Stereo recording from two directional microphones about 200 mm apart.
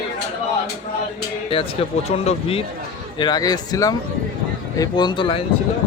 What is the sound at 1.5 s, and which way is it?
Speech, 25° left (ahead or behind).